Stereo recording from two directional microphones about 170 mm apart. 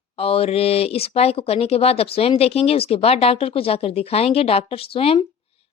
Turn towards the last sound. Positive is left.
turn(degrees=35)  # may be behind; listen again after turning